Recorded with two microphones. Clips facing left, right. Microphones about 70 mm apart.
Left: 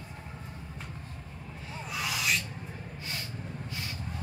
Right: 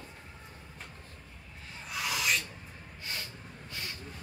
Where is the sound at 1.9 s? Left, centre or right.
Centre.